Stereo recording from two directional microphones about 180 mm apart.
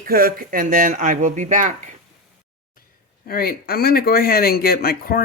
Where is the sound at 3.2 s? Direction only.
55° left (ahead or behind).